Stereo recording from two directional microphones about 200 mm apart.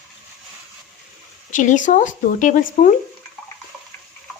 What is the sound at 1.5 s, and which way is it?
A woman's voice, 40° left (ahead or behind).